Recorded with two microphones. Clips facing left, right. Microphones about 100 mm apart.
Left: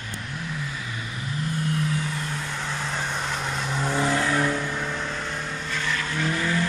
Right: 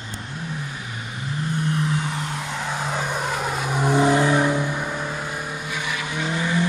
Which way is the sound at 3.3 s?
10° right (ahead or behind).